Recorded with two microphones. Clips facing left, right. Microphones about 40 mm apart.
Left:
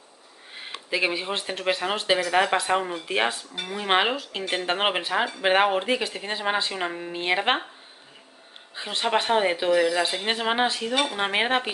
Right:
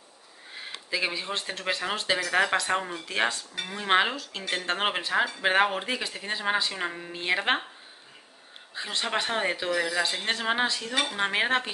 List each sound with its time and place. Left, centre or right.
0.8 s speech: left
8.7 s speech: centre